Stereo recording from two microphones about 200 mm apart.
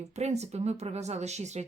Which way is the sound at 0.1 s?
35° right (ahead or behind).